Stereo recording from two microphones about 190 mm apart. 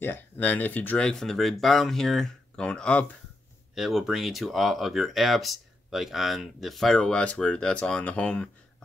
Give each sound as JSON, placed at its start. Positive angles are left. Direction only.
{"t": 0.0, "sound": "speech", "side_deg": 10}